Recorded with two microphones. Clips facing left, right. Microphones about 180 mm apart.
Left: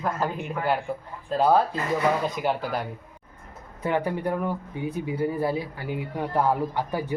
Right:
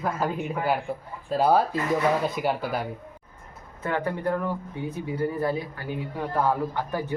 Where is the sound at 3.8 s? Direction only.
15° left (ahead or behind).